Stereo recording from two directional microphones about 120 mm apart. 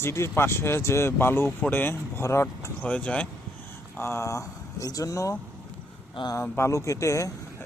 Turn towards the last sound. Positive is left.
turn(degrees=25)  # may be behind; listen again after turning